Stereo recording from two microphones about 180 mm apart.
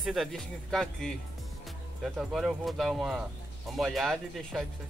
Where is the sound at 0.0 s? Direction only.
Centre (ahead or behind).